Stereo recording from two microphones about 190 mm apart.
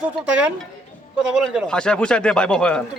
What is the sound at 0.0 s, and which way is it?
Speech, 5° right (ahead or behind).